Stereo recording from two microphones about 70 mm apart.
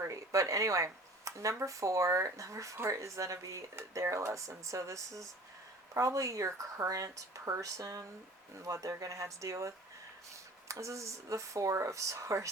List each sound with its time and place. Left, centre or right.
0.0 s speech: right